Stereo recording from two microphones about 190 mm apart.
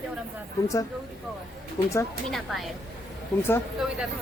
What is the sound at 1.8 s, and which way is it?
Speech, 20° left (ahead or behind).